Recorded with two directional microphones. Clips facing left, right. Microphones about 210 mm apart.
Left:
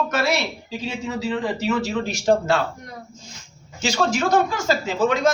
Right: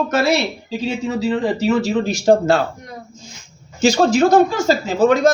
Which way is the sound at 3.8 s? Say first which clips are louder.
Right 8 dB; 35° right (ahead or behind).